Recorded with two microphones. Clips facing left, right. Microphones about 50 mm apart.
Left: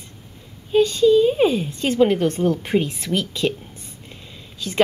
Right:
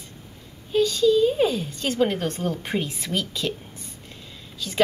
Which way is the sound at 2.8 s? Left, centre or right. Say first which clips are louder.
Left 4 dB; left.